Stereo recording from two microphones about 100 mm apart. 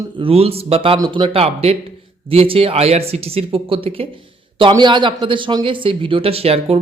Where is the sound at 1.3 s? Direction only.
90° right.